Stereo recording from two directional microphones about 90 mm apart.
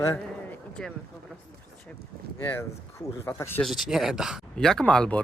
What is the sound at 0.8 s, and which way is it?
Speech, 10° left (ahead or behind).